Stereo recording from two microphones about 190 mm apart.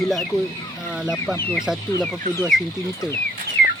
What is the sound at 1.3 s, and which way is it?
Speech, 10° left (ahead or behind).